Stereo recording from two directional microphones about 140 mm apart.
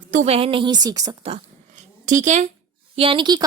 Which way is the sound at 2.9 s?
40° right (ahead or behind).